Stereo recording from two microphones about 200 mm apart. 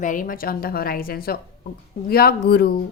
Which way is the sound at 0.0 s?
40° left (ahead or behind).